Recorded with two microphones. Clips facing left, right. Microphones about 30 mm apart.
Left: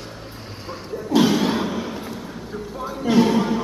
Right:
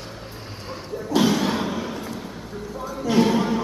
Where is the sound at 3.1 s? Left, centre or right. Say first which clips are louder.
Left 2 dB; centre.